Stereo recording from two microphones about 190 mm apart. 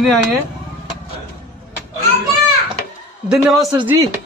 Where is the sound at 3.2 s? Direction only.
Centre (ahead or behind).